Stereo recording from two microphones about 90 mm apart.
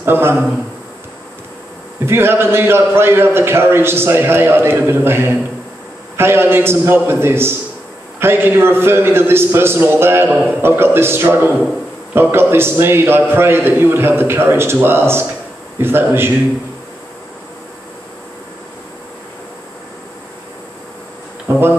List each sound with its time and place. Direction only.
0.0 s a man's voice: 25° right (ahead or behind)
2.0 s a man's voice: 25° right (ahead or behind)
21.5 s speech: 25° right (ahead or behind)